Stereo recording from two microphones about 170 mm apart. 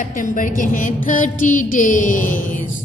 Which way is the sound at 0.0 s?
50° left (ahead or behind).